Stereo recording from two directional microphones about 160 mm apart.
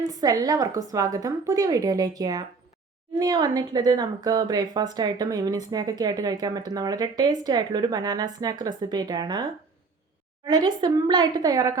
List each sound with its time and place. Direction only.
0.0 s speech: 25° right (ahead or behind)